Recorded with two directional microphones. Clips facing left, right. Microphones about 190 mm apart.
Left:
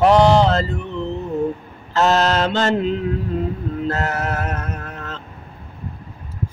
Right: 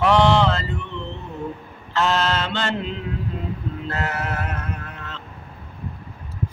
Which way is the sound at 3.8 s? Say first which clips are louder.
Left 4 dB; 40° left (ahead or behind).